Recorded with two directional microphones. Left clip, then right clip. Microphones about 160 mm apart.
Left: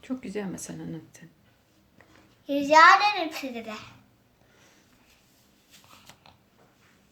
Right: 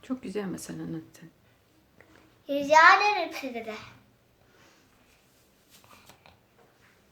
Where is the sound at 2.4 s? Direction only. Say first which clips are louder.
Left 2 dB; 20° right (ahead or behind).